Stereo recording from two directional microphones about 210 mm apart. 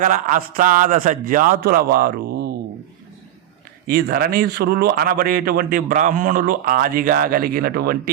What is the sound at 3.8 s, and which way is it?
A man's voice, 45° right (ahead or behind).